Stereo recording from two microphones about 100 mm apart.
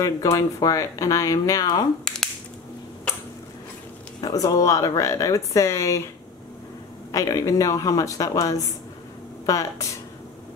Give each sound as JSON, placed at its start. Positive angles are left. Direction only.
{"t": 0.0, "sound": "speech", "side_deg": 35}
{"t": 4.2, "sound": "speech", "side_deg": 35}
{"t": 7.1, "sound": "speech", "side_deg": 35}